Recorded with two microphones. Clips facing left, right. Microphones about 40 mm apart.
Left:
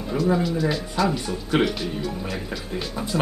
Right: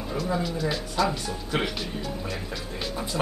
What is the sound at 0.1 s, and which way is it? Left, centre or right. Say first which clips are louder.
Speech: left 6 dB; centre.